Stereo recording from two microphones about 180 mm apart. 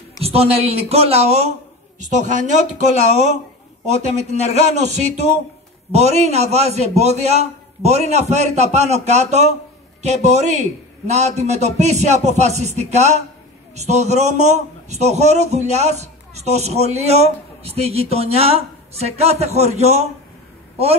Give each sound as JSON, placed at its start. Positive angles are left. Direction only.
{"t": 0.2, "sound": "a man's voice", "side_deg": -35}
{"t": 3.8, "sound": "a man's voice", "side_deg": -40}